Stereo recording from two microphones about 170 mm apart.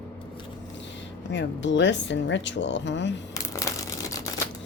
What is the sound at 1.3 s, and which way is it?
A woman's voice, 90° left.